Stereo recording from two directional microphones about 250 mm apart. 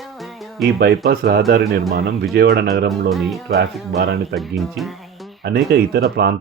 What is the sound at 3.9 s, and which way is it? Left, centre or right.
Speech, right.